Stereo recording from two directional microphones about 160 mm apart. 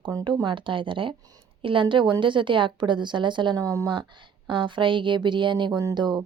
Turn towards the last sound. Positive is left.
turn(degrees=-25)  # may be behind; listen again after turning